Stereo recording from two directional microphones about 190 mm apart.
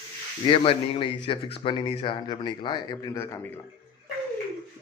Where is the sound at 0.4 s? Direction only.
30° left (ahead or behind).